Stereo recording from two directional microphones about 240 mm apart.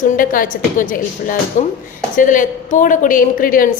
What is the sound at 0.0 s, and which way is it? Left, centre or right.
A woman's voice, left.